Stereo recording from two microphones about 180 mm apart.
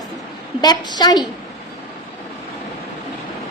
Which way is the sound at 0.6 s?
20° left (ahead or behind).